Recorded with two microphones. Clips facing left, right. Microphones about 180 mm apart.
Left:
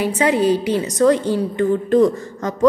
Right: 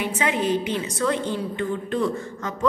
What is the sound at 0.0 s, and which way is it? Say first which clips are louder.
A woman's voice: left 7 dB; 35° left (ahead or behind).